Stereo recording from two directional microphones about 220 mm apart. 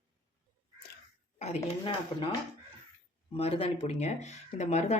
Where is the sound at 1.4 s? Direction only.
25° left (ahead or behind).